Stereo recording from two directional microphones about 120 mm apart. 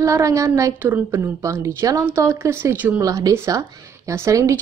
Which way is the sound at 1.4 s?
25° right (ahead or behind).